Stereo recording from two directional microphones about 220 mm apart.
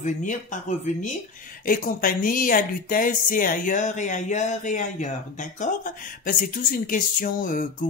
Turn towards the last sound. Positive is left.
turn(degrees=40)  # may be behind; listen again after turning